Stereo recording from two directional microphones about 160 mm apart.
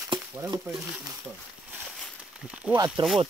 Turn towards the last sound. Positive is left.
turn(degrees=-25)  # may be behind; listen again after turning